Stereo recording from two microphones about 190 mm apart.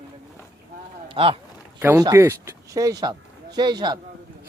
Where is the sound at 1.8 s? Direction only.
15° right (ahead or behind).